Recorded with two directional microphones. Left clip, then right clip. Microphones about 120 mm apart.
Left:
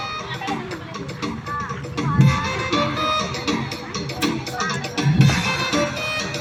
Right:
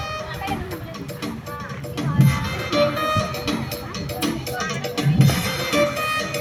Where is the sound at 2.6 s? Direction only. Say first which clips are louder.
Right 4 dB; 50° right (ahead or behind).